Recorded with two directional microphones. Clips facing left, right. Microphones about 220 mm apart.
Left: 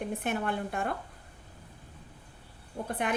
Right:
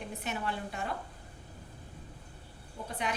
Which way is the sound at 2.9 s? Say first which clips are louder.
Left 4 dB; 55° left (ahead or behind).